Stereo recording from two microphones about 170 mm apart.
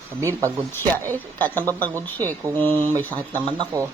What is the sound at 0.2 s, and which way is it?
Speech, 15° right (ahead or behind).